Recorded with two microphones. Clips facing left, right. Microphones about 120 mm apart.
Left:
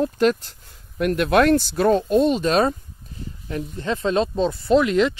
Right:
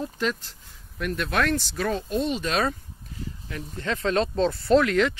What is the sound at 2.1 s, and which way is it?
Speech, 40° left (ahead or behind).